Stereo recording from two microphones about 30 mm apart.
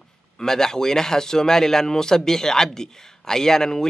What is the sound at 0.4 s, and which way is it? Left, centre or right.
A man's voice, centre.